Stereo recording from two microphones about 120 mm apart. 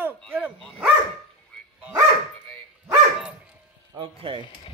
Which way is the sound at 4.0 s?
45° right (ahead or behind).